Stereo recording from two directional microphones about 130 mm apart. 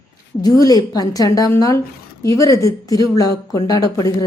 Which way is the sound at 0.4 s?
30° left (ahead or behind).